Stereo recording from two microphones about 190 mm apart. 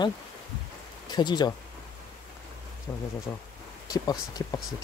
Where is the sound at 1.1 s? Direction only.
20° left (ahead or behind).